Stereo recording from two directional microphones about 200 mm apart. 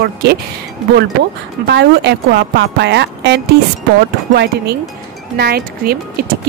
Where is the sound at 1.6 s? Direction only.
55° right (ahead or behind).